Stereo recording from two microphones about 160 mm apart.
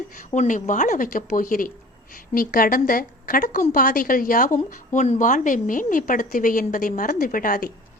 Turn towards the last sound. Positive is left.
turn(degrees=60)  # may be behind; listen again after turning